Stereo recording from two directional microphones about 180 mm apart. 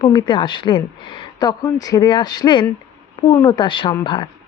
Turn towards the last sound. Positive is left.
turn(degrees=25)  # may be behind; listen again after turning